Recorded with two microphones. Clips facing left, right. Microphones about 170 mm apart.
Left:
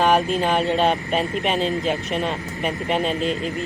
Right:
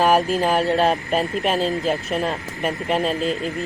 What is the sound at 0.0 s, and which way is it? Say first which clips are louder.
Speech: right 1 dB; 5° right (ahead or behind).